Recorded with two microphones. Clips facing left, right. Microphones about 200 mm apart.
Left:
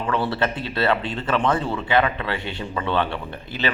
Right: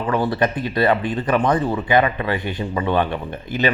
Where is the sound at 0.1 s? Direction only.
15° right (ahead or behind).